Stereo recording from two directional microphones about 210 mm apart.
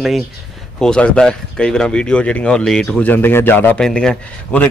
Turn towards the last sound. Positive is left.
turn(degrees=5)  # may be behind; listen again after turning